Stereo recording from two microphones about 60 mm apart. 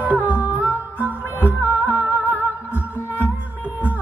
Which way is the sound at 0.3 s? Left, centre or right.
Right.